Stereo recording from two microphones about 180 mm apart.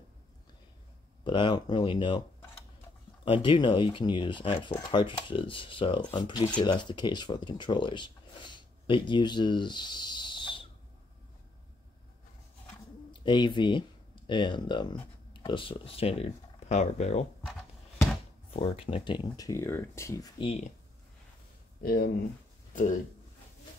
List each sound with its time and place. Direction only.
1.2 s speech: 25° left (ahead or behind)
3.3 s speech: 30° left (ahead or behind)
13.1 s speech: 25° left (ahead or behind)
18.5 s speech: 30° left (ahead or behind)
20.4 s speech: 35° left (ahead or behind)
21.8 s speech: 55° left (ahead or behind)